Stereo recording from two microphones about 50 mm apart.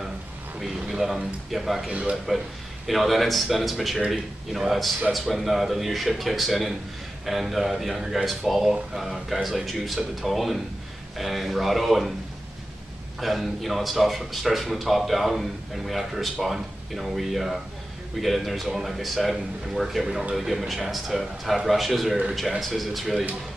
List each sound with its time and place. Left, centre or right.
0.6 s speech: centre
1.9 s a man's voice: right
2.9 s speech: centre
13.2 s speech: centre